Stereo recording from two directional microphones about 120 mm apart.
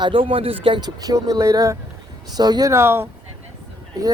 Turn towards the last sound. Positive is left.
turn(degrees=-30)  # may be behind; listen again after turning